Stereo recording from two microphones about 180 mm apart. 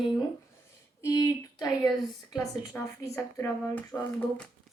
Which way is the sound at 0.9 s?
15° left (ahead or behind).